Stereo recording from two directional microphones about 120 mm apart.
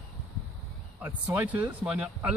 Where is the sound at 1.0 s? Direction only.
15° right (ahead or behind).